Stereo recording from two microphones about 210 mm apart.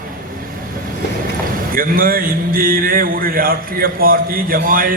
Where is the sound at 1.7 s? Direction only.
45° right (ahead or behind).